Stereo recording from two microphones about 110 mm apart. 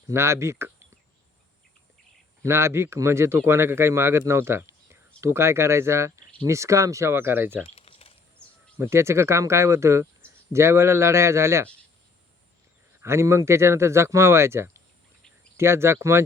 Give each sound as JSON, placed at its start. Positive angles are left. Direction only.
{"t": 0.1, "sound": "speech", "side_deg": -25}
{"t": 2.4, "sound": "speech", "side_deg": -25}
{"t": 7.8, "sound": "a sound", "side_deg": 65}
{"t": 8.8, "sound": "speech", "side_deg": -25}
{"t": 13.0, "sound": "speech", "side_deg": -25}